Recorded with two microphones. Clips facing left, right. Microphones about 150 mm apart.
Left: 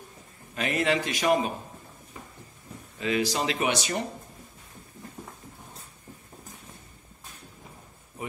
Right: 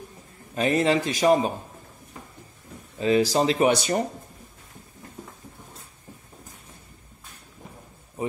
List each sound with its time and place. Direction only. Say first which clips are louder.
0.6 s speech: right 5 dB; 35° right (ahead or behind)
3.0 s speech: right 7 dB; 35° right (ahead or behind)